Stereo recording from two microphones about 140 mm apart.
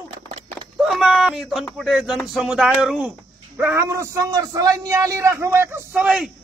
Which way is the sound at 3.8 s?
20° right (ahead or behind).